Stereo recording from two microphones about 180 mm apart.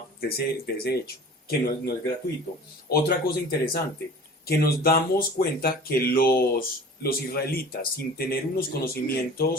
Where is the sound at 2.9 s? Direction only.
60° left (ahead or behind).